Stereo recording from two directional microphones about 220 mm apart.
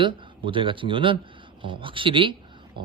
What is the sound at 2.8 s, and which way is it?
Pig, 20° right (ahead or behind).